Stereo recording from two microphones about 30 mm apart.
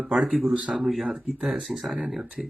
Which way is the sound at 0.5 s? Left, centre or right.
Right.